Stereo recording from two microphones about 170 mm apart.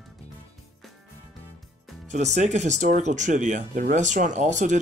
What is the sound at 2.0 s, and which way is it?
Speech, 45° right (ahead or behind).